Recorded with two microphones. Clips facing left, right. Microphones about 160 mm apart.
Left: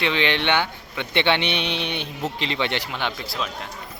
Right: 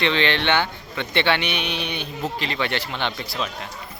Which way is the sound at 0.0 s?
15° left (ahead or behind).